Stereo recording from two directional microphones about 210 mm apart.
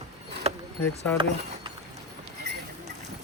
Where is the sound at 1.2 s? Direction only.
20° right (ahead or behind).